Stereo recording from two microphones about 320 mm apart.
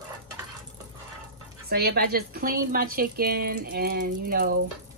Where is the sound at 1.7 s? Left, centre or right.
Right.